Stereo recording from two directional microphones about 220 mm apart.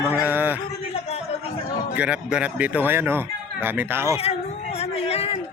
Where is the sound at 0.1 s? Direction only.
10° right (ahead or behind).